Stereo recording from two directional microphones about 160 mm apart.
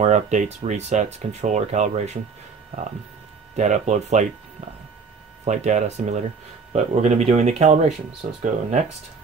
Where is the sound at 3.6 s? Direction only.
45° right (ahead or behind).